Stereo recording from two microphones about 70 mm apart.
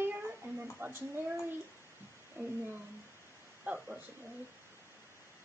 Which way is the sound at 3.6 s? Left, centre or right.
Centre.